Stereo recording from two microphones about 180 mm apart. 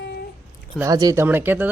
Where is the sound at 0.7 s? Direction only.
20° right (ahead or behind).